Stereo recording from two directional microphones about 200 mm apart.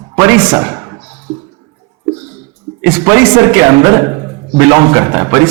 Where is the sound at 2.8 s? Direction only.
15° right (ahead or behind).